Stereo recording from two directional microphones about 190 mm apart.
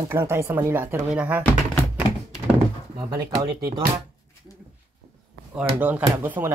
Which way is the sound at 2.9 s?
20° right (ahead or behind).